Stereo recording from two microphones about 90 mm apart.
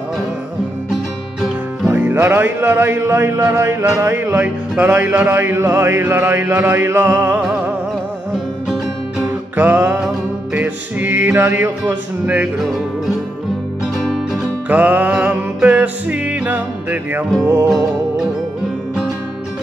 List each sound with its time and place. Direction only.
1.9 s music: 25° right (ahead or behind)
9.6 s music: 20° right (ahead or behind)
9.9 s music: 5° right (ahead or behind)
10.6 s music: 20° right (ahead or behind)
13.9 s music: 5° right (ahead or behind)
14.7 s music: 20° right (ahead or behind)
17.6 s music: 5° right (ahead or behind)